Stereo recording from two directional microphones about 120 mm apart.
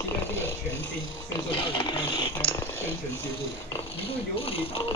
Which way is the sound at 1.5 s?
45° left (ahead or behind).